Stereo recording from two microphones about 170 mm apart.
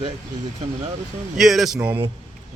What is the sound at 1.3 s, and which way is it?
Speech, centre (ahead or behind).